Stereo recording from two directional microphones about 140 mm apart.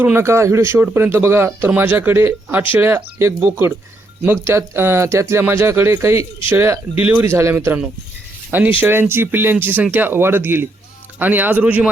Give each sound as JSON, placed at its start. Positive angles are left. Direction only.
{"t": 0.0, "sound": "speech", "side_deg": -15}